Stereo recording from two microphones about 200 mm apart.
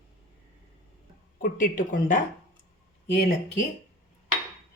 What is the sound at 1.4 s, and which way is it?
Speech, 40° left (ahead or behind).